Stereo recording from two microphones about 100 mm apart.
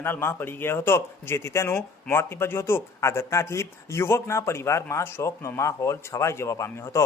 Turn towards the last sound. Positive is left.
turn(degrees=30)  # may be behind; listen again after turning